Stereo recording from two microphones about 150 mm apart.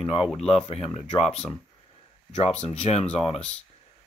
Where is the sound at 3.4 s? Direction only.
10° left (ahead or behind).